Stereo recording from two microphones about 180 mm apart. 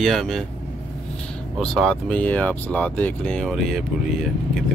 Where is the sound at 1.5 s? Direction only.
Centre (ahead or behind).